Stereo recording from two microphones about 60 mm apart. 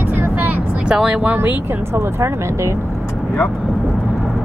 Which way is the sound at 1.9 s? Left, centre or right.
Right.